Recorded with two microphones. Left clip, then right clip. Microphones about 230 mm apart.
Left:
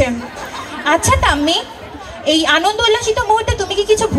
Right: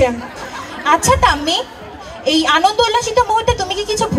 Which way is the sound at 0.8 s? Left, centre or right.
Right.